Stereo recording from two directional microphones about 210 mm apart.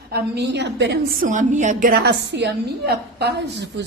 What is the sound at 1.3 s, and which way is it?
A woman's voice, 35° right (ahead or behind).